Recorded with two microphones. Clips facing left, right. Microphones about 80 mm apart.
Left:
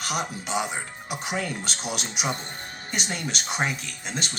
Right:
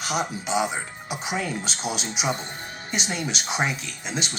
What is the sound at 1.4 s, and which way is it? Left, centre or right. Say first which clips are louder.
Speech: right 2 dB; left.